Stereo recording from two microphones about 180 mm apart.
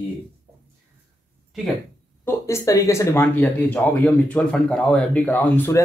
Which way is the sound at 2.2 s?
15° left (ahead or behind).